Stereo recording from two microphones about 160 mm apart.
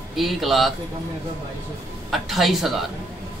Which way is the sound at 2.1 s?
Centre (ahead or behind).